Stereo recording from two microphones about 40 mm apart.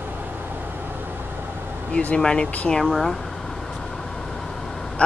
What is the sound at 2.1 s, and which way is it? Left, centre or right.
Speech, centre.